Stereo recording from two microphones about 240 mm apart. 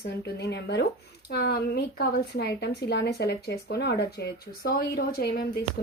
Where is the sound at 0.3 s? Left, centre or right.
Left.